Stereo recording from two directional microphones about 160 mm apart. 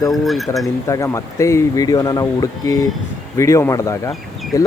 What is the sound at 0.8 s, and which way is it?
Speech, 20° left (ahead or behind).